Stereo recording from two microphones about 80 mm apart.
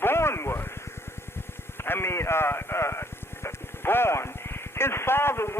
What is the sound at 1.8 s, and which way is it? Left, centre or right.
A man's voice, left.